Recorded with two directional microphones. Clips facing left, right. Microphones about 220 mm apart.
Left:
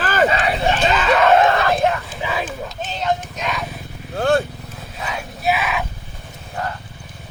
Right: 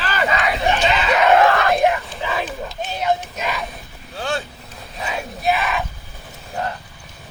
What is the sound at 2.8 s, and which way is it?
Speech, 10° right (ahead or behind).